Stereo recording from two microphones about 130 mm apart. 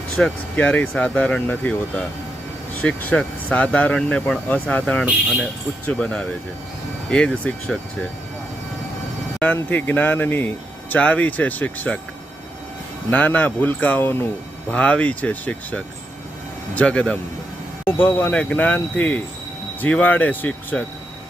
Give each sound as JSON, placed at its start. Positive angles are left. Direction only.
{"t": 0.2, "sound": "speech", "side_deg": 10}
{"t": 9.6, "sound": "speech", "side_deg": 10}
{"t": 13.1, "sound": "speech", "side_deg": 10}